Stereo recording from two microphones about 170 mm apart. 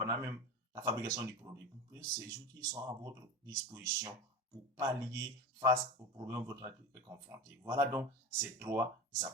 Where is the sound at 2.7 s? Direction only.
25° right (ahead or behind).